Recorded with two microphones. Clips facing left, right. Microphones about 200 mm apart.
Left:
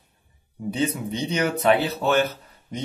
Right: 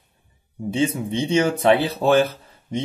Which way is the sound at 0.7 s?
25° right (ahead or behind).